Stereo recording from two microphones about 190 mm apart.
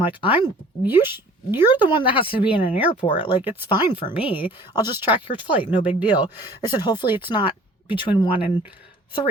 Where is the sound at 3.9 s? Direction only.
25° left (ahead or behind).